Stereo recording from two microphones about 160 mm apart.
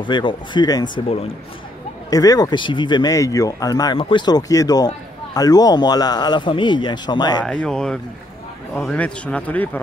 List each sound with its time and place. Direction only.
0.0 s a man's voice: 30° left (ahead or behind)
1.0 s speech: 40° left (ahead or behind)
2.0 s a man's voice: 20° left (ahead or behind)
7.4 s speech: 5° left (ahead or behind)